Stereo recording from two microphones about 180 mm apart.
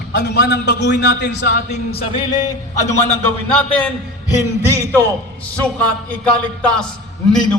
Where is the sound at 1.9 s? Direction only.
30° left (ahead or behind).